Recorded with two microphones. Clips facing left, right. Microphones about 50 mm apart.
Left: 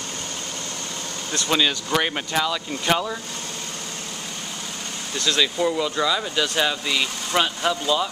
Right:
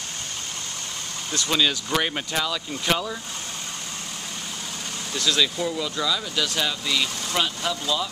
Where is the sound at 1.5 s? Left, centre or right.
Centre.